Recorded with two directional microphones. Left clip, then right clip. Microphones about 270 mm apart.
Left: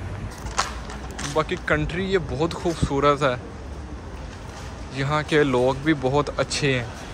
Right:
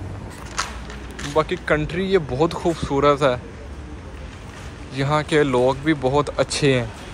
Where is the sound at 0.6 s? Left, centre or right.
Left.